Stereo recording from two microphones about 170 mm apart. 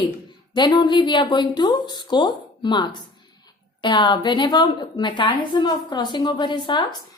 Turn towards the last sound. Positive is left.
turn(degrees=30)  # may be behind; listen again after turning